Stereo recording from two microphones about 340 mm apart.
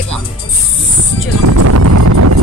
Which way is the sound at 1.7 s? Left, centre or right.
Right.